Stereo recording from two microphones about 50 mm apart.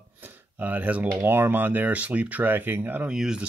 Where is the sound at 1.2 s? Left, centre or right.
Right.